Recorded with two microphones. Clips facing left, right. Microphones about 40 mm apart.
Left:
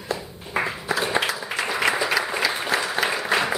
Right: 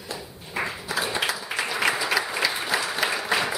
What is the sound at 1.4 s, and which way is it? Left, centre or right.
Applause, centre.